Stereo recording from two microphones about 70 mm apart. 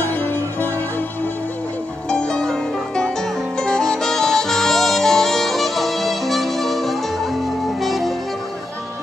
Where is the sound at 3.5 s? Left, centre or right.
Centre.